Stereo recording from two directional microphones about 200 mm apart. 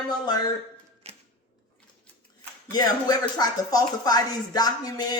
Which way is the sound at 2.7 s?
20° left (ahead or behind).